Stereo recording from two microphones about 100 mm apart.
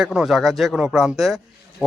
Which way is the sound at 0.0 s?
5° right (ahead or behind).